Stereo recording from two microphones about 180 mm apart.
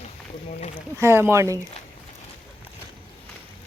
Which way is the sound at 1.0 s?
15° right (ahead or behind).